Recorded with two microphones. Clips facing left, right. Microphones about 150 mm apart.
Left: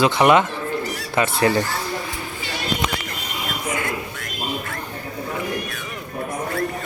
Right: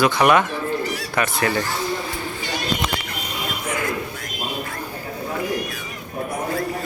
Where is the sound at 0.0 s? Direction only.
20° left (ahead or behind).